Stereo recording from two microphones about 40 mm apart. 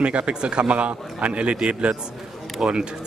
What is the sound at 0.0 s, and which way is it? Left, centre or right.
A man's voice, right.